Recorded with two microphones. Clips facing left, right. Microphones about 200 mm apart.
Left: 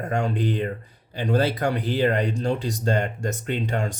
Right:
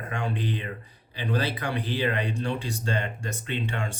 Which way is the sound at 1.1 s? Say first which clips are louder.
Left 6 dB; 45° left (ahead or behind).